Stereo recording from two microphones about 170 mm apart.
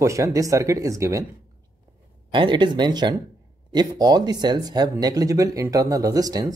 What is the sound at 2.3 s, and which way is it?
Speech, 25° right (ahead or behind).